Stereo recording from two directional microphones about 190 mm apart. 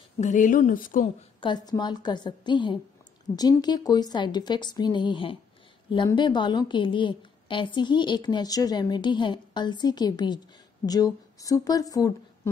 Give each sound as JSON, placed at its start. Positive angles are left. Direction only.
{"t": 0.2, "sound": "speech", "side_deg": 40}
{"t": 1.4, "sound": "a woman's voice", "side_deg": 20}